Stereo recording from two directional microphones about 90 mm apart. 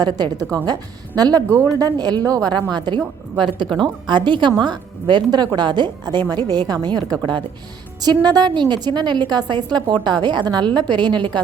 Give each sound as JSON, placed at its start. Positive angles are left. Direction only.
{"t": 0.0, "sound": "a woman's voice", "side_deg": -45}